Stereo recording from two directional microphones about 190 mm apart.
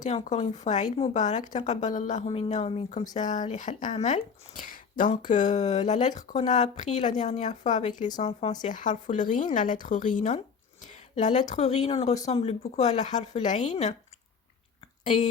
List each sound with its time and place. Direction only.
0.0 s speech: 40° left (ahead or behind)
8.0 s speech: 25° left (ahead or behind)
15.0 s speech: 35° left (ahead or behind)